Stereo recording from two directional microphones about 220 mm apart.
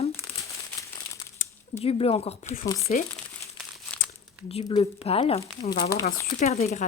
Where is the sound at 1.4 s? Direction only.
35° left (ahead or behind).